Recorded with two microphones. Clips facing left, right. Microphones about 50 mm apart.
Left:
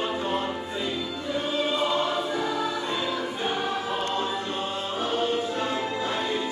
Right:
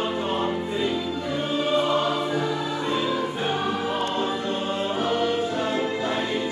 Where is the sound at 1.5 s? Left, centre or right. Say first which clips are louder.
Right 2 dB; right.